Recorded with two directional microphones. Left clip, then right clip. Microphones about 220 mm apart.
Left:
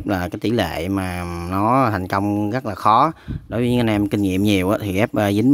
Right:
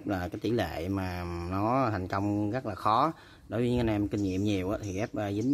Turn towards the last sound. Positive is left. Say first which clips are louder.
# left 14 dB
turn(degrees=45)  # may be behind; listen again after turning